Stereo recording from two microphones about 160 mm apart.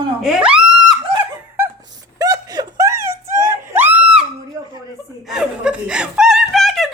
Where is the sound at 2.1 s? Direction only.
25° right (ahead or behind); by 4.3 s 5° right (ahead or behind).